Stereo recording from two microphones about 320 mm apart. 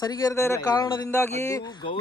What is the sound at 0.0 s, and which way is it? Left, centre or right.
Speech, centre.